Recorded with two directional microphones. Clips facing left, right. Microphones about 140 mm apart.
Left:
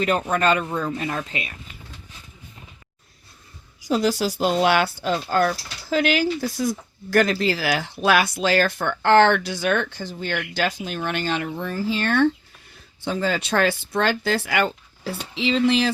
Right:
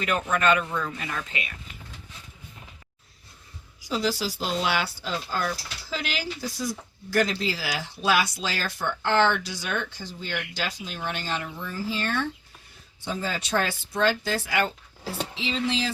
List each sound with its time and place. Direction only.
0.0 s speech: 35° left (ahead or behind)
3.8 s speech: 50° left (ahead or behind)